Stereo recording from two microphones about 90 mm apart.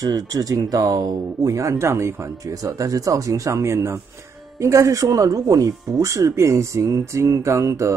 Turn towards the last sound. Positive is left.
turn(degrees=-35)  # may be behind; listen again after turning